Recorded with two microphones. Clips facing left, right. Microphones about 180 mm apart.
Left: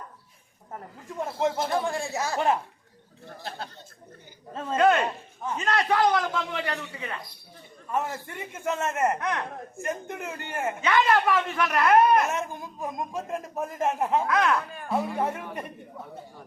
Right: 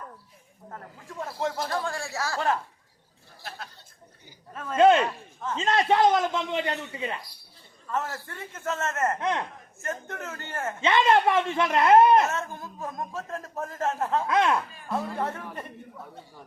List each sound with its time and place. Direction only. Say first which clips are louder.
0.7 s speech: left 3 dB; 20° left (ahead or behind)
4.5 s speech: left 4 dB; 25° left (ahead or behind)
4.8 s a man's voice: right 3 dB; 25° right (ahead or behind)
5.0 s a sound: left 1 dB; 15° left (ahead or behind)
5.5 s a man's voice: right 2 dB; 25° right (ahead or behind)
7.9 s speech: left 2 dB; 15° left (ahead or behind)
10.8 s a man's voice: right 2 dB; 25° right (ahead or behind)
12.2 s speech: even; 15° left (ahead or behind)
14.3 s a man's voice: right 1 dB; 25° right (ahead or behind)
14.8 s speech: left 3 dB; 5° left (ahead or behind)